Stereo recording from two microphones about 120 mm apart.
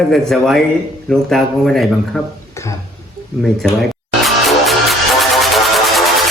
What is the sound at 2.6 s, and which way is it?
Speech, 25° left (ahead or behind).